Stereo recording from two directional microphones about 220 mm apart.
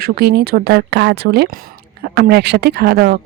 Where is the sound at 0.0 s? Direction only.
45° right (ahead or behind).